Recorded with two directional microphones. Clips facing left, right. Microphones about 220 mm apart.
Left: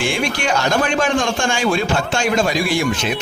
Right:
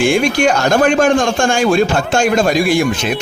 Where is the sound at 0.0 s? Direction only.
50° right (ahead or behind).